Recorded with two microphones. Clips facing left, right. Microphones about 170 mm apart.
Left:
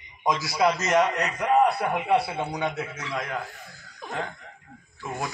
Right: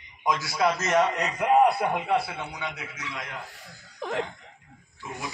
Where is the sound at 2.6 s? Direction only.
50° left (ahead or behind).